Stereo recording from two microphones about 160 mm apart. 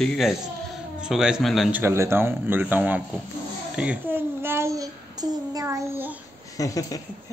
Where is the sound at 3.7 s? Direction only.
10° right (ahead or behind).